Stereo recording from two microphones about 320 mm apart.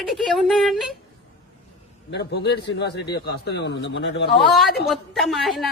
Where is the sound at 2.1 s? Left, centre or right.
Left.